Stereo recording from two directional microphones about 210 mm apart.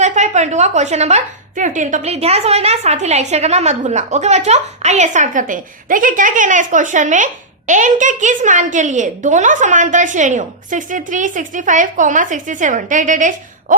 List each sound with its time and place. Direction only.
0.0 s a woman's voice: 35° right (ahead or behind)